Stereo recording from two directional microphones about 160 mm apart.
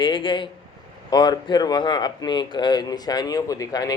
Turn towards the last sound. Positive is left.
turn(degrees=25)  # may be behind; listen again after turning